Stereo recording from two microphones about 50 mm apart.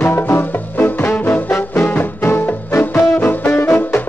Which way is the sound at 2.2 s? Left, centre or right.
Left.